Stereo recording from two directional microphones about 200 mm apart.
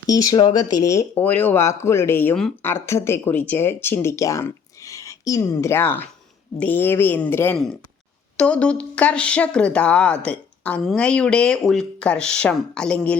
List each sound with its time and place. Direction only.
0.1 s speech: 20° left (ahead or behind)